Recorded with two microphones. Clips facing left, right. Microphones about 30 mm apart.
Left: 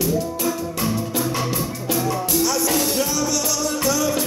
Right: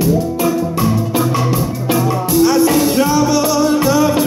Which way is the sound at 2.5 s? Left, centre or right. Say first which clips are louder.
Right 10 dB; right.